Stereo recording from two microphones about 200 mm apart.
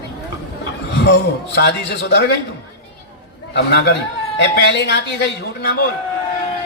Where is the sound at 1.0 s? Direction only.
55° left (ahead or behind).